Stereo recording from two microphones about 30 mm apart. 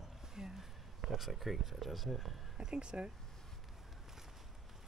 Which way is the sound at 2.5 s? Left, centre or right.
Right.